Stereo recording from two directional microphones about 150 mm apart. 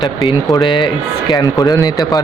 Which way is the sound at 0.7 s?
30° left (ahead or behind).